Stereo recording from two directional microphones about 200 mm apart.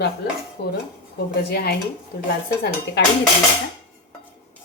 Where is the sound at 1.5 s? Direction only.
50° left (ahead or behind).